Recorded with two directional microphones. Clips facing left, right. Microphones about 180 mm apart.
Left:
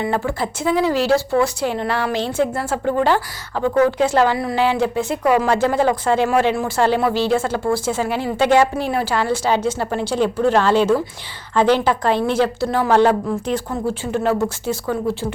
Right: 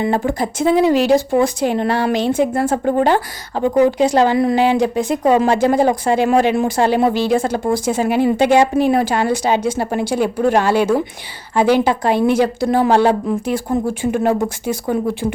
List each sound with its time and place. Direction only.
0.0 s speech: 30° right (ahead or behind)
0.3 s a woman's voice: 15° right (ahead or behind)